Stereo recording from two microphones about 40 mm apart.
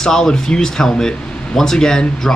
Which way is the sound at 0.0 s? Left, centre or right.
Centre.